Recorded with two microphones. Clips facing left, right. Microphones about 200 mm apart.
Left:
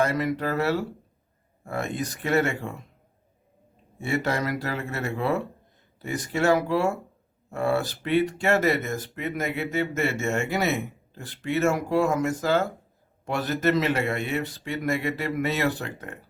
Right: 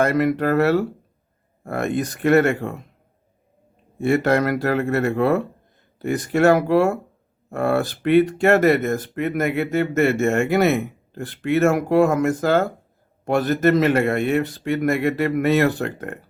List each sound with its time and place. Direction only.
0.0 s speech: 55° right (ahead or behind)
4.0 s speech: 55° right (ahead or behind)